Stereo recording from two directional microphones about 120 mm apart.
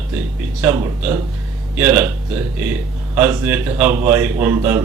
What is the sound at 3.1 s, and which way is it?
Speech, 15° right (ahead or behind).